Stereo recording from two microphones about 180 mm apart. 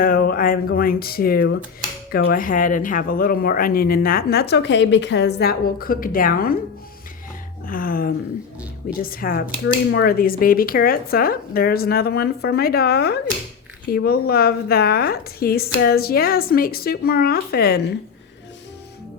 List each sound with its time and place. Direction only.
0.0 s speech: 55° left (ahead or behind)
7.7 s speech: 55° left (ahead or behind)